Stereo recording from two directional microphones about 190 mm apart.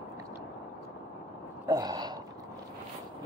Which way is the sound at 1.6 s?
20° right (ahead or behind).